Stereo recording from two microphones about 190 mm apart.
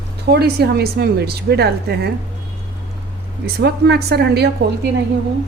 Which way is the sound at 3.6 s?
60° right (ahead or behind).